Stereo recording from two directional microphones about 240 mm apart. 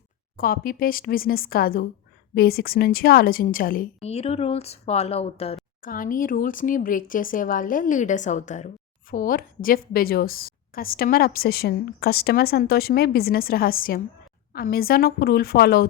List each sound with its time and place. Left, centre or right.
0.3 s speech: left
5.8 s speech: left